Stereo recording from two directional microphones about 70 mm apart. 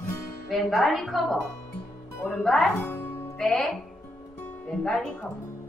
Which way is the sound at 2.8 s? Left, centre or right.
Left.